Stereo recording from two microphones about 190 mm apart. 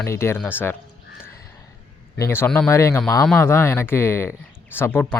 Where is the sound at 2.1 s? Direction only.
15° left (ahead or behind).